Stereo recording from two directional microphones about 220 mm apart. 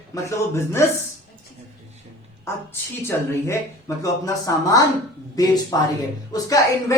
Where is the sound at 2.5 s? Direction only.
10° left (ahead or behind).